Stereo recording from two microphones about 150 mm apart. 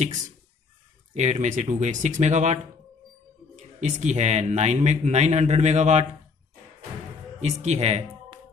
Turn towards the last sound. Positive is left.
turn(degrees=-45)  # may be behind; listen again after turning